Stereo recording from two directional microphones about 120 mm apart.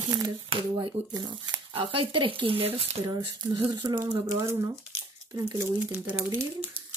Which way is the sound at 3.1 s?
35° right (ahead or behind).